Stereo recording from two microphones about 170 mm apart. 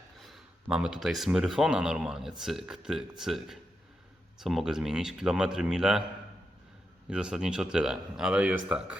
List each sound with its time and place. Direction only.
0.2 s speech: centre (ahead or behind)
7.1 s speech: 5° right (ahead or behind)